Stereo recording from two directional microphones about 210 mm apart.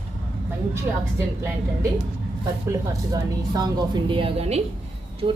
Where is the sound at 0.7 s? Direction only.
15° right (ahead or behind).